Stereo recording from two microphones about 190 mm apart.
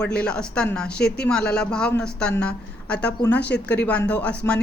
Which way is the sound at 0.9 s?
55° left (ahead or behind).